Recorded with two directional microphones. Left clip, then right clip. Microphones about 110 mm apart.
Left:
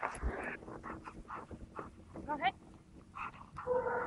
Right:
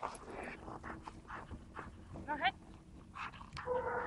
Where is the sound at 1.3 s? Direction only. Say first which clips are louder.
Left 3 dB; 15° right (ahead or behind).